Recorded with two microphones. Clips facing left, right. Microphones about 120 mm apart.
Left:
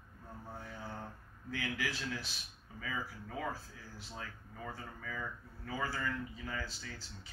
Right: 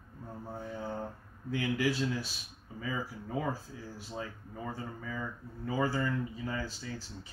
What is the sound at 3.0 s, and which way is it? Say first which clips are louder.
Mantra: right 6 dB; 20° right (ahead or behind).